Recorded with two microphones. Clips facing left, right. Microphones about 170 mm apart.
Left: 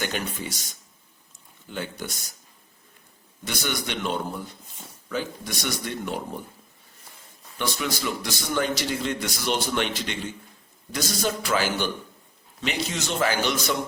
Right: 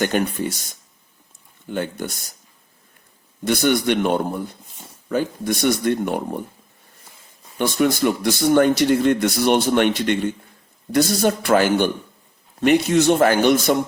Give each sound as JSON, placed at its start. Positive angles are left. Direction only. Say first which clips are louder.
{"t": 0.0, "sound": "speech", "louder": "right 10 dB", "side_deg": -55}
{"t": 3.4, "sound": "a man's voice", "louder": "right 12 dB", "side_deg": -55}
{"t": 7.6, "sound": "a man's voice", "louder": "right 10 dB", "side_deg": -50}